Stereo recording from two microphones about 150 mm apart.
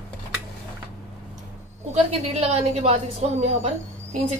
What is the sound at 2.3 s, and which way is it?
Speech, 45° right (ahead or behind).